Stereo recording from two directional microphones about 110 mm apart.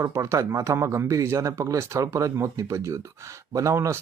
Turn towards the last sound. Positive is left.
turn(degrees=-25)  # may be behind; listen again after turning